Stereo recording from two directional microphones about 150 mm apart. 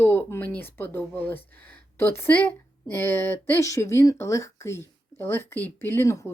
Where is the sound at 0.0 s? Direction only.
15° left (ahead or behind).